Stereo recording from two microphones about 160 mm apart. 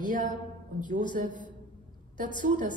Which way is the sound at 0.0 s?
55° right (ahead or behind).